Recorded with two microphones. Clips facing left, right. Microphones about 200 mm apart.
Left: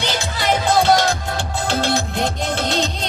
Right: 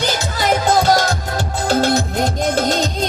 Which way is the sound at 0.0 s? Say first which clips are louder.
Right 3 dB; 40° right (ahead or behind).